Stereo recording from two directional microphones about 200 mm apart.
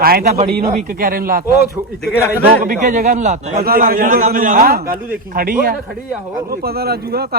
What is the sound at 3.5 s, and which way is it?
A man's voice, 50° right (ahead or behind).